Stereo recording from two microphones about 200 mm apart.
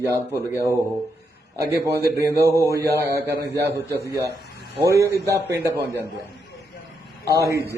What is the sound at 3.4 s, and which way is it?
Speech, 60° right (ahead or behind).